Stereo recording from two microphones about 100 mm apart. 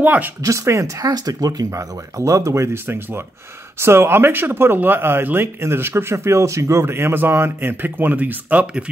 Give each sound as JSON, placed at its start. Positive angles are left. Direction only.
{"t": 0.0, "sound": "speech", "side_deg": -15}
{"t": 0.4, "sound": "speech", "side_deg": -30}